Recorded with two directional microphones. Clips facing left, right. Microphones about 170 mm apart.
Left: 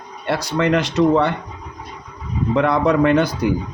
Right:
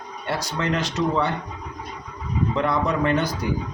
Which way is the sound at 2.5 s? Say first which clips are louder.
Left 8 dB; 65° left (ahead or behind).